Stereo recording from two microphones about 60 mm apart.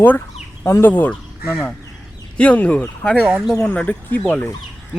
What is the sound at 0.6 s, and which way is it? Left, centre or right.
Speech, left.